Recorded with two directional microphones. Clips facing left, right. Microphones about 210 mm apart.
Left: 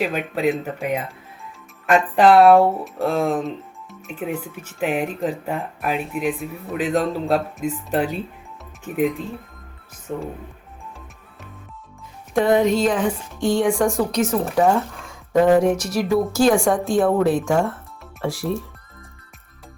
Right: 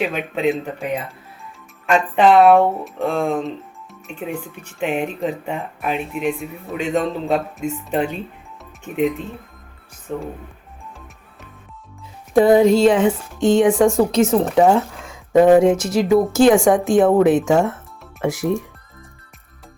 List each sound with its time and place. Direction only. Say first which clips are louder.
0.0 s speech: right 1 dB; centre (ahead or behind)
12.3 s speech: right 5 dB; 30° right (ahead or behind)